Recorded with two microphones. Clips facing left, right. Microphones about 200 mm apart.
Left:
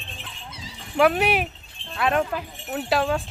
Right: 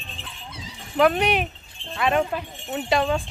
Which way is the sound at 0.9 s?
5° left (ahead or behind).